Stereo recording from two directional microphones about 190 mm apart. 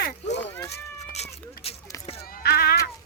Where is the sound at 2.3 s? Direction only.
55° left (ahead or behind).